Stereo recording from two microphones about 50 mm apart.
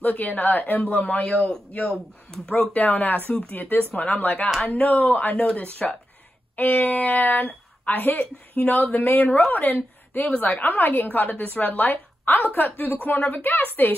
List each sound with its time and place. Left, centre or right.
0.0 s a woman's voice: left
1.3 s speech: centre
2.7 s a woman's voice: left
3.3 s speech: left
3.5 s speech: left
3.9 s a woman's voice: left